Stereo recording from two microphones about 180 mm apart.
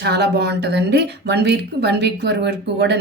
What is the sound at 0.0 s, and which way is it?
A woman's voice, 65° right (ahead or behind).